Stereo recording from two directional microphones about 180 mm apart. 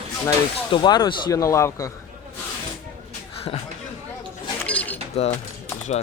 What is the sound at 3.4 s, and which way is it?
Speech, 35° left (ahead or behind).